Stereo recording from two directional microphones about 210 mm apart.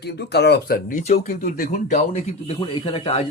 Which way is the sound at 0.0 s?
50° left (ahead or behind).